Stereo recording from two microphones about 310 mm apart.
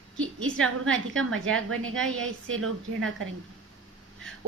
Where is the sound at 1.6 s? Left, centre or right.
Right.